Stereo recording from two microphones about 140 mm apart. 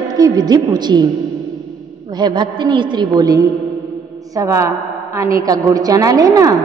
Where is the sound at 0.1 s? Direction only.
30° right (ahead or behind).